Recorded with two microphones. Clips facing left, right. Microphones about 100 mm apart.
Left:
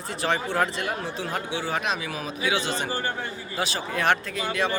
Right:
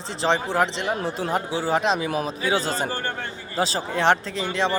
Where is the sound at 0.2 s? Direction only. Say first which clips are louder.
Right 3 dB; 25° right (ahead or behind).